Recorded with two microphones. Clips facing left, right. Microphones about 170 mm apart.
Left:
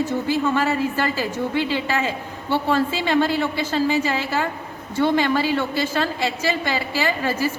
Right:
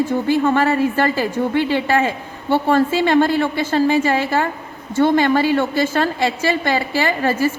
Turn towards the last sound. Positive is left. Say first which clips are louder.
# right 4 dB
turn(degrees=-50)  # may be behind; listen again after turning